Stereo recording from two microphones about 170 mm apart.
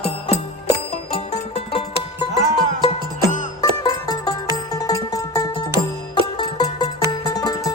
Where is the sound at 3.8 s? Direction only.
25° left (ahead or behind).